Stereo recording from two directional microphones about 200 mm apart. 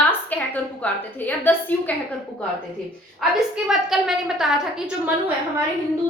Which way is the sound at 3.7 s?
Centre (ahead or behind).